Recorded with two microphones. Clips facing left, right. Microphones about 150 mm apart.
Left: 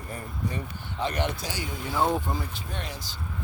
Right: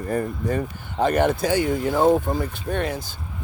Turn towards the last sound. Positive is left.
turn(degrees=-55)  # may be behind; listen again after turning